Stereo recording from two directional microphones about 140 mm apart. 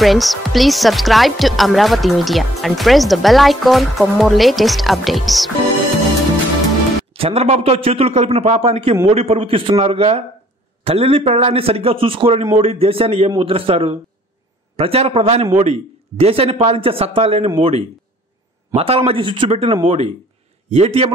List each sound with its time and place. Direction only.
0.0 s speech: centre (ahead or behind)
7.2 s a man's voice: 45° right (ahead or behind)